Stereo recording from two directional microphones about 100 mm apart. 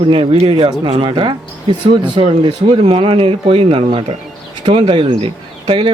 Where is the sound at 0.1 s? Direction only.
75° right (ahead or behind).